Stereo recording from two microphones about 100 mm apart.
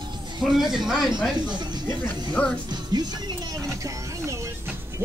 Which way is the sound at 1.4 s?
45° right (ahead or behind).